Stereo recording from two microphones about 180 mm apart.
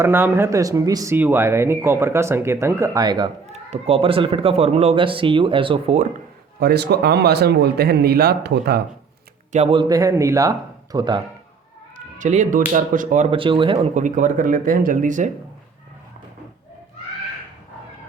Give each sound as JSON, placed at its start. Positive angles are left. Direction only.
{"t": 0.0, "sound": "speech", "side_deg": -10}
{"t": 3.4, "sound": "speech", "side_deg": -35}
{"t": 6.6, "sound": "speech", "side_deg": -65}
{"t": 9.5, "sound": "speech", "side_deg": -35}
{"t": 12.2, "sound": "speech", "side_deg": -45}
{"t": 13.3, "sound": "speech", "side_deg": -30}
{"t": 13.9, "sound": "speech", "side_deg": -45}